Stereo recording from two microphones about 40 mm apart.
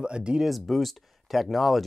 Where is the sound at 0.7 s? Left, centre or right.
Centre.